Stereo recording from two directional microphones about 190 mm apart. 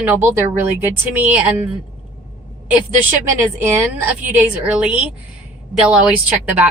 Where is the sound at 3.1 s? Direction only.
10° right (ahead or behind).